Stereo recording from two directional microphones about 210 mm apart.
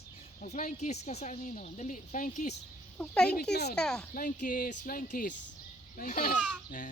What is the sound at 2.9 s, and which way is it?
Speech, 5° left (ahead or behind).